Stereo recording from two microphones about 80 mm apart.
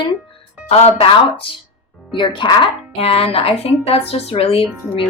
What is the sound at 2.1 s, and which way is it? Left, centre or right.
Speech, left.